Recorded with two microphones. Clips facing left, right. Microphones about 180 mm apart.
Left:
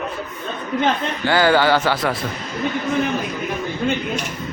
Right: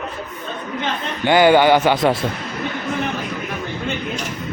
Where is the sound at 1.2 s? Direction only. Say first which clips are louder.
Right 4 dB; 20° right (ahead or behind).